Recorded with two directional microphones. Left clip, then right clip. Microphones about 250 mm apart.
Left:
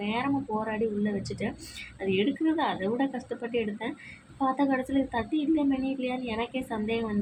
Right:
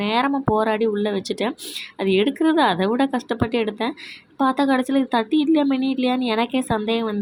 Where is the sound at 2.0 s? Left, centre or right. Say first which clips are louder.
Right 8 dB; right.